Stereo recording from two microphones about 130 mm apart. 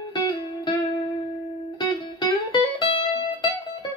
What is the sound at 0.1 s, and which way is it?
Music, 35° left (ahead or behind).